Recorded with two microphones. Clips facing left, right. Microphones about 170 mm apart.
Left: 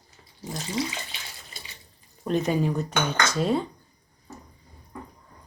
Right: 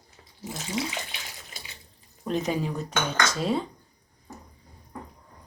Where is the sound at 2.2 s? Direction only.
Centre (ahead or behind).